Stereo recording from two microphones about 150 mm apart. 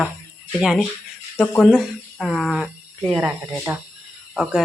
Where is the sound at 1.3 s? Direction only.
10° left (ahead or behind).